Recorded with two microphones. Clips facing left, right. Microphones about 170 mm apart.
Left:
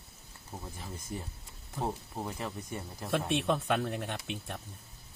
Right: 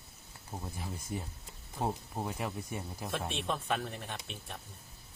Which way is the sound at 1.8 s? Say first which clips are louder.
Right 1 dB; 10° right (ahead or behind).